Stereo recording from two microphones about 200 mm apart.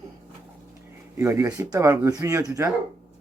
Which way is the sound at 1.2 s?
15° right (ahead or behind).